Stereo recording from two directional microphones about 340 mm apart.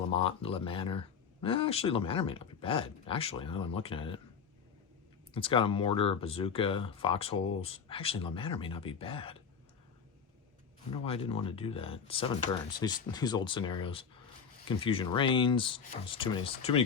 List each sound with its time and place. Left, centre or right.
0.1 s speech: centre
5.3 s speech: centre
11.0 s speech: centre